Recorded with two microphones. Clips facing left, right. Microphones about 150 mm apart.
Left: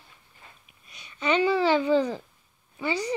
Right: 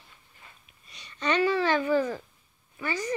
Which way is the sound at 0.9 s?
5° left (ahead or behind).